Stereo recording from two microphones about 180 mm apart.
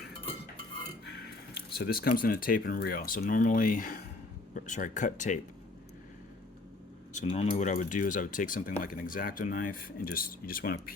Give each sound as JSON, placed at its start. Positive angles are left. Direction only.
{"t": 1.0, "sound": "speech", "side_deg": 65}
{"t": 7.1, "sound": "speech", "side_deg": 40}